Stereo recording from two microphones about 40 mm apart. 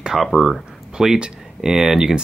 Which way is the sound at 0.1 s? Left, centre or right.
Centre.